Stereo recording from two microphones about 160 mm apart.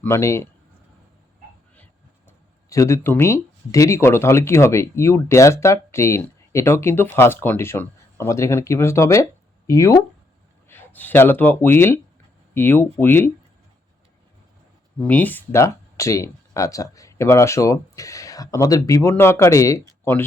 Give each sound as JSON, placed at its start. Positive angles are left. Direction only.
{"t": 0.0, "sound": "speech", "side_deg": 15}
{"t": 2.6, "sound": "speech", "side_deg": 20}
{"t": 15.0, "sound": "speech", "side_deg": 10}